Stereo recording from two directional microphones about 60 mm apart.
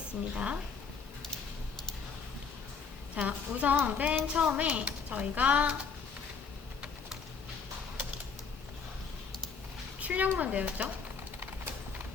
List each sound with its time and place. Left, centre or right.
0.3 s speech: centre
3.2 s speech: right
10.0 s a sound: right
10.3 s speech: right